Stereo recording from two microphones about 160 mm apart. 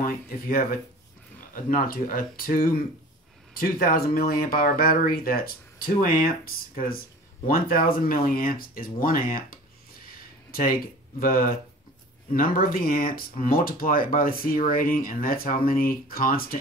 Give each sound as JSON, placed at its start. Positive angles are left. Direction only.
{"t": 0.0, "sound": "speech", "side_deg": 65}